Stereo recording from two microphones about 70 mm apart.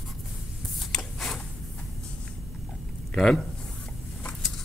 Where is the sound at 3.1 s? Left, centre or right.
Centre.